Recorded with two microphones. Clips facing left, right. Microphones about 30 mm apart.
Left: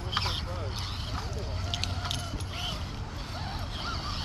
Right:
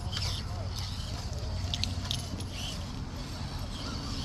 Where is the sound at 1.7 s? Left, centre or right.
Centre.